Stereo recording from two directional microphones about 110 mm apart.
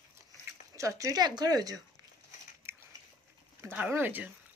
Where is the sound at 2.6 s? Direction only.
25° right (ahead or behind).